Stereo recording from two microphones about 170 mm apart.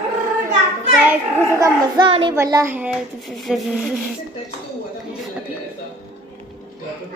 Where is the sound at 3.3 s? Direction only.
Centre (ahead or behind).